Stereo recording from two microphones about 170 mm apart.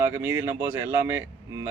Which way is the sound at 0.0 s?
15° right (ahead or behind).